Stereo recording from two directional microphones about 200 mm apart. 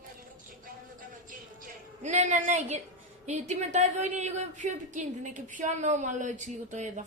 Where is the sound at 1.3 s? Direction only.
40° right (ahead or behind).